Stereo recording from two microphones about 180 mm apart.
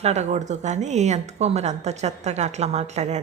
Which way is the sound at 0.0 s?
40° right (ahead or behind).